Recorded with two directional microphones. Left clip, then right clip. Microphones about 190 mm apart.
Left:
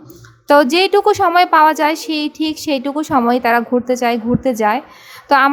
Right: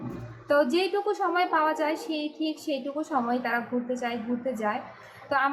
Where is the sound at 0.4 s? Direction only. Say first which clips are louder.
Left 12 dB; 55° left (ahead or behind).